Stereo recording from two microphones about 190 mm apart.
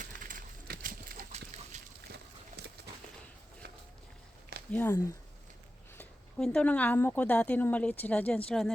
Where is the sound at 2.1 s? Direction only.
60° right (ahead or behind).